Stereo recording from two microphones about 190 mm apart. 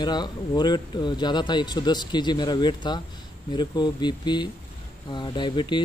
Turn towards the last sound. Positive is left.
turn(degrees=25)  # may be behind; listen again after turning